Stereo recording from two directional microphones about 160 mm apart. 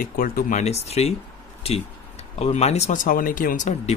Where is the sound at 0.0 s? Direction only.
60° left (ahead or behind); by 1.1 s 40° left (ahead or behind).